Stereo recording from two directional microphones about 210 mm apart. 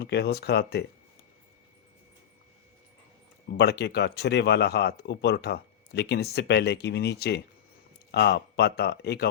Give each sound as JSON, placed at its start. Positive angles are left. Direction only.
{"t": 0.0, "sound": "speech", "side_deg": 50}
{"t": 3.6, "sound": "speech", "side_deg": 50}